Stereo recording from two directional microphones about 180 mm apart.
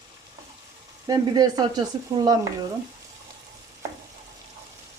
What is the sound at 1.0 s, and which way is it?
Sizzle, 20° right (ahead or behind).